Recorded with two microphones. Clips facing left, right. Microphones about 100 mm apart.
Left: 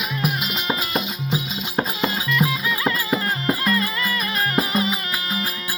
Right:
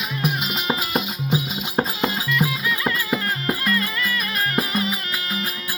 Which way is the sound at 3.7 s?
10° left (ahead or behind).